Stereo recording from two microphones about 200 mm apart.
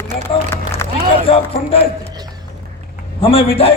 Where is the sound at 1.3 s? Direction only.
30° left (ahead or behind).